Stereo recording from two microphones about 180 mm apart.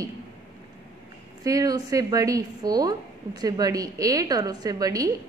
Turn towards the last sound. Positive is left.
turn(degrees=-20)  # may be behind; listen again after turning